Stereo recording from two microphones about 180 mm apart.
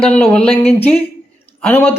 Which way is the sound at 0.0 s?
5° left (ahead or behind).